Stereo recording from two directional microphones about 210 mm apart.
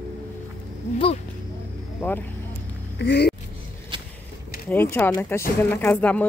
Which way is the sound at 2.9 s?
55° left (ahead or behind).